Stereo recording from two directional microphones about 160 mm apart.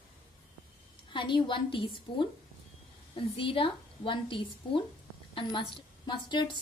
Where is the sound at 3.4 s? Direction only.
35° left (ahead or behind).